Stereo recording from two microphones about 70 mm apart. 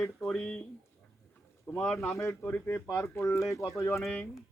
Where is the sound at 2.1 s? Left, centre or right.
Left.